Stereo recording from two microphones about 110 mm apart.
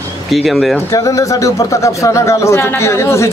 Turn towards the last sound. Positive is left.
turn(degrees=25)  # may be behind; listen again after turning